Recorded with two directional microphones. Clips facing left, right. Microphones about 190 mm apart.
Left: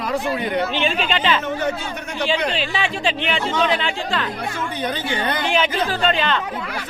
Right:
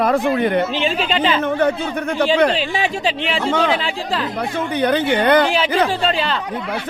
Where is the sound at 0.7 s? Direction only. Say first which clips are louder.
Right 2 dB; 35° right (ahead or behind).